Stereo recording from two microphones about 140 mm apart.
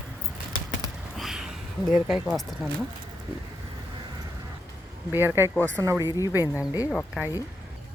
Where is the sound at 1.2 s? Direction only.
5° right (ahead or behind).